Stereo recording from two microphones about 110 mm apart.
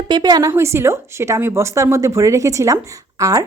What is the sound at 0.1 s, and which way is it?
Speech, 40° right (ahead or behind).